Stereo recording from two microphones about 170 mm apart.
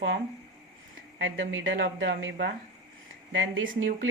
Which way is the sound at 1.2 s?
90° right.